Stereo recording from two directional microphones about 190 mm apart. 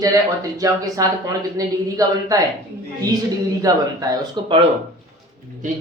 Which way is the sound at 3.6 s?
20° right (ahead or behind).